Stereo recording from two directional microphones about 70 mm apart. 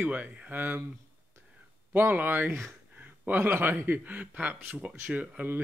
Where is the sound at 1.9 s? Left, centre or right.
Right.